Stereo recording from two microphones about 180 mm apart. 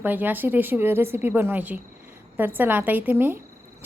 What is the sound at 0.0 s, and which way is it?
A woman's voice, 10° right (ahead or behind).